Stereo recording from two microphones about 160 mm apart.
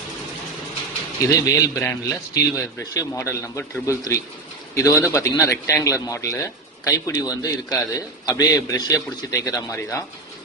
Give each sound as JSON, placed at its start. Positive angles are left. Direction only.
{"t": 1.3, "sound": "a man's voice", "side_deg": 20}